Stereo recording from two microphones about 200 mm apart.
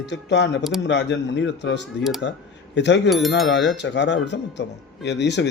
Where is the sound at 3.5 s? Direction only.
60° left (ahead or behind).